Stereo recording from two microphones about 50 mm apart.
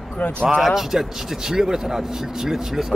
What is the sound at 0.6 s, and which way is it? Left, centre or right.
Speech, centre.